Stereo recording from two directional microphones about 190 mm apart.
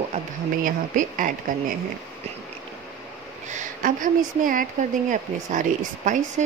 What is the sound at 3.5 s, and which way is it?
A woman's voice, 40° right (ahead or behind).